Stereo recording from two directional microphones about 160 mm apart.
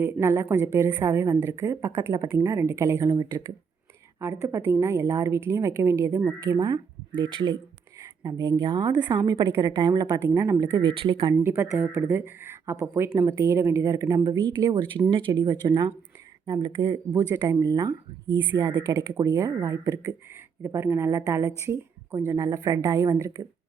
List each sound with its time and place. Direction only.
0.0 s speech: 15° right (ahead or behind)
8.2 s speech: 25° right (ahead or behind)
10.8 s speech: 30° right (ahead or behind)
11.4 s speech: 15° right (ahead or behind)